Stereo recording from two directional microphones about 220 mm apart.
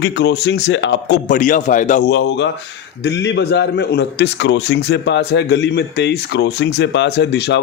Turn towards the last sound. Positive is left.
turn(degrees=50)  # may be behind; listen again after turning